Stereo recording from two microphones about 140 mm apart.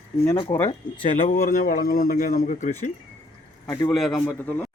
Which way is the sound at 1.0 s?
45° left (ahead or behind).